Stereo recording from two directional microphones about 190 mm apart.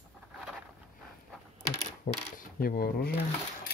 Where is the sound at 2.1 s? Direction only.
40° left (ahead or behind).